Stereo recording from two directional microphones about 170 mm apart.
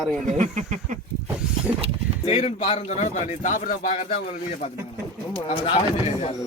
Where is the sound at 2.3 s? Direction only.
35° left (ahead or behind).